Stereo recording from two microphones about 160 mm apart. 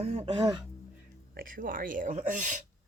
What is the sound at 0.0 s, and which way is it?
Speech, 40° right (ahead or behind).